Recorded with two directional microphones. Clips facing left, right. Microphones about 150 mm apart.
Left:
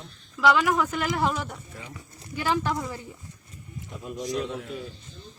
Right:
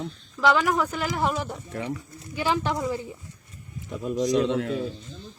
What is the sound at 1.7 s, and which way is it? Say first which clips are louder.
Speech: right 12 dB; 75° right (ahead or behind).